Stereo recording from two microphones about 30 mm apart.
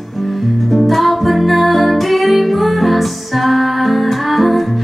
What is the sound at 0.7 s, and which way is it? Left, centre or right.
Music, centre.